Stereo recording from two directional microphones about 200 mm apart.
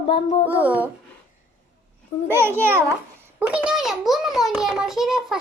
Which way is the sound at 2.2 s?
10° right (ahead or behind).